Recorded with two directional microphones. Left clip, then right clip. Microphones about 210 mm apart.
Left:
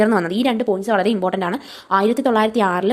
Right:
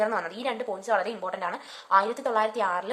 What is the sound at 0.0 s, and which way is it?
A woman's voice, 35° left (ahead or behind).